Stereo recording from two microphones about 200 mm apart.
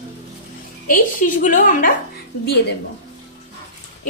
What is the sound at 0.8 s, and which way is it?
A woman's voice, 40° left (ahead or behind).